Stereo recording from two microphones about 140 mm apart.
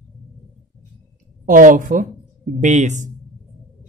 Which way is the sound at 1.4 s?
70° right (ahead or behind).